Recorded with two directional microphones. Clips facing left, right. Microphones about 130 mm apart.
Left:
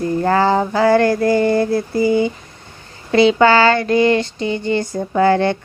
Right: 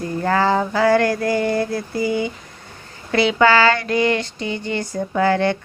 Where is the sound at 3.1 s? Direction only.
30° left (ahead or behind).